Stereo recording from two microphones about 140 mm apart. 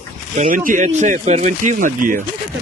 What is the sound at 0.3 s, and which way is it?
Speech, 75° right (ahead or behind).